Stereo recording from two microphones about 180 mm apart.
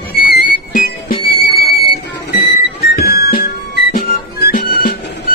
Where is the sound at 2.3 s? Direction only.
60° left (ahead or behind).